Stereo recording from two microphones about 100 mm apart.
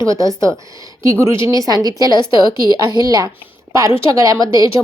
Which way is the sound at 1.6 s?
40° right (ahead or behind).